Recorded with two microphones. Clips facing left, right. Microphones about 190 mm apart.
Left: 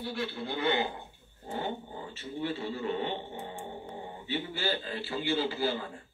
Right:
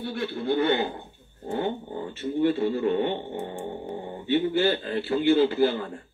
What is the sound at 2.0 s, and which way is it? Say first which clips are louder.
A man's voice: right 11 dB; 55° right (ahead or behind).